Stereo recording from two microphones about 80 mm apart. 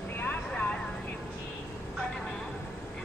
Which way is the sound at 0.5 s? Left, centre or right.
Centre.